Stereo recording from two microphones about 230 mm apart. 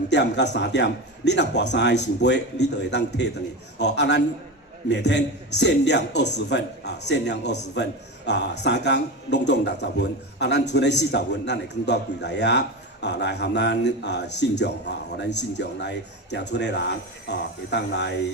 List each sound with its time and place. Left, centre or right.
0.1 s a man's voice: left